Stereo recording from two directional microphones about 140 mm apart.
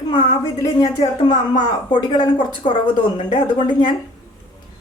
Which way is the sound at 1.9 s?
30° left (ahead or behind).